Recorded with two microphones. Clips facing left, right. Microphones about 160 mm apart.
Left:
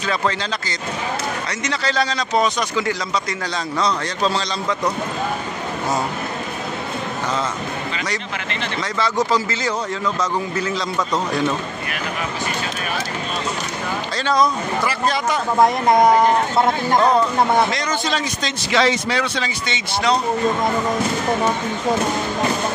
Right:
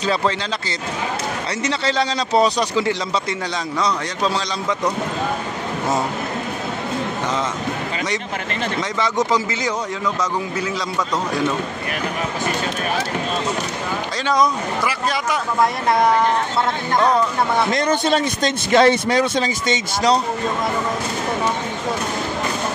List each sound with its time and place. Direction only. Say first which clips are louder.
1.6 s a man's voice: right 2 dB; 25° right (ahead or behind)
8.9 s a man's voice: left 1 dB; 15° right (ahead or behind)
14.2 s a man's voice: even; 15° right (ahead or behind)
15.5 s speech: left 4 dB; 20° left (ahead or behind)
17.6 s speech: right 5 dB; 55° right (ahead or behind)